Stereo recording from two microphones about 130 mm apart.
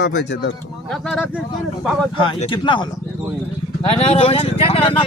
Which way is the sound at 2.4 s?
40° left (ahead or behind).